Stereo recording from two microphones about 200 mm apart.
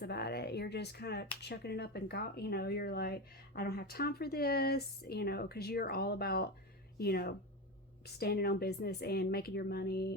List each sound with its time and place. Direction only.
0.0 s speech: 55° left (ahead or behind)